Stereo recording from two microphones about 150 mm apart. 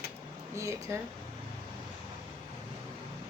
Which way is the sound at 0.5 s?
20° right (ahead or behind).